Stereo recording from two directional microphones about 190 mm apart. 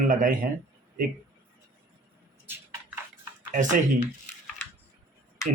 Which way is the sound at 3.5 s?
40° right (ahead or behind).